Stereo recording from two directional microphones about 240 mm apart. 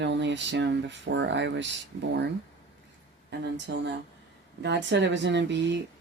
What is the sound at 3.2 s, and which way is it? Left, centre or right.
Speech, right.